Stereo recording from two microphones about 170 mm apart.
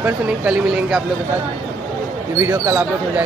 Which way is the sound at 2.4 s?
15° right (ahead or behind).